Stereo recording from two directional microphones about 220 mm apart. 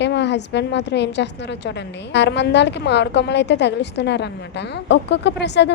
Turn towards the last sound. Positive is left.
turn(degrees=50)  # may be behind; listen again after turning